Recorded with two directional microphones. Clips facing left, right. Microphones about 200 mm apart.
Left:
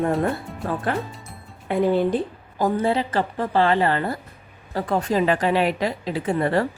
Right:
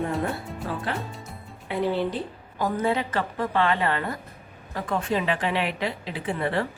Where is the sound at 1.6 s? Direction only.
50° left (ahead or behind).